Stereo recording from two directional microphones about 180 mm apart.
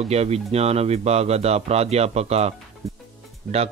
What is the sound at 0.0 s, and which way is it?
Speech, 35° right (ahead or behind).